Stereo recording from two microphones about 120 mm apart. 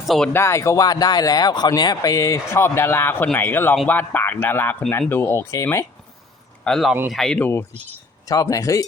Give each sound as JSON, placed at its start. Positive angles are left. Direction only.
{"t": 0.0, "sound": "speech", "side_deg": 0}
{"t": 0.3, "sound": "speech", "side_deg": 25}
{"t": 6.7, "sound": "speech", "side_deg": 5}
{"t": 8.3, "sound": "speech", "side_deg": 30}